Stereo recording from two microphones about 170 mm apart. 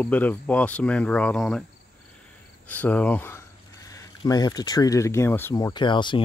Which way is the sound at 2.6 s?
10° left (ahead or behind).